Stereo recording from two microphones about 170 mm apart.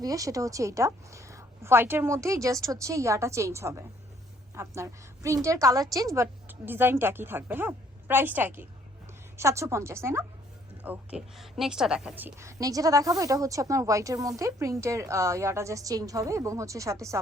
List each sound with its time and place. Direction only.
0.0 s a woman's voice: 20° right (ahead or behind)